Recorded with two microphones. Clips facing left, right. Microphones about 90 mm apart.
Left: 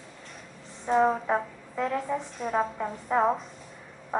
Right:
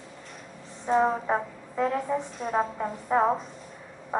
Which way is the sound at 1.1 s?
5° right (ahead or behind).